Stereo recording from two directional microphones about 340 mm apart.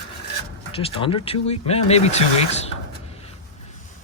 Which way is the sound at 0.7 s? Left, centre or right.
Centre.